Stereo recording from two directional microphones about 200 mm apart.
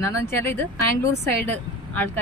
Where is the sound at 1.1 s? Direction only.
55° right (ahead or behind).